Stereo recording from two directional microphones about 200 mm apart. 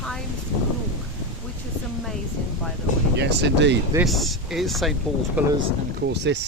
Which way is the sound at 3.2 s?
60° right (ahead or behind).